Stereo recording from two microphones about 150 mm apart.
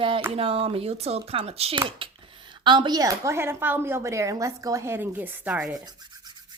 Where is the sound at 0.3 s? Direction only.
40° right (ahead or behind); by 5.7 s 10° right (ahead or behind).